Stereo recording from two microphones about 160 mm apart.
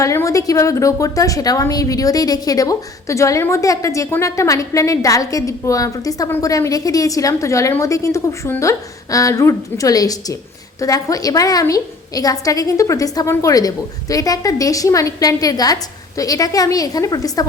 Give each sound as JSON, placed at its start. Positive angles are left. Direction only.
{"t": 0.0, "sound": "a woman's voice", "side_deg": 20}